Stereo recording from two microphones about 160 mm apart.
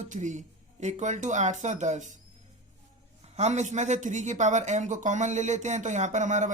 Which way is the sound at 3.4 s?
45° right (ahead or behind).